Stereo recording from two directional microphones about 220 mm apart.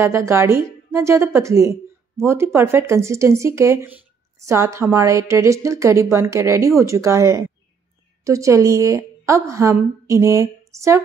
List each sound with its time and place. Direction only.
0.0 s a woman's voice: 10° right (ahead or behind)